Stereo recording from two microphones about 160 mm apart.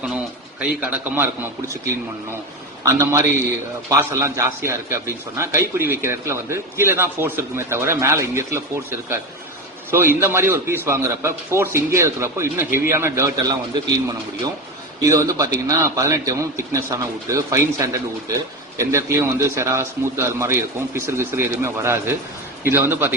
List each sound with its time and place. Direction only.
0.8 s a man's voice: 10° right (ahead or behind)
2.8 s a man's voice: 20° right (ahead or behind)
15.0 s a man's voice: 20° right (ahead or behind)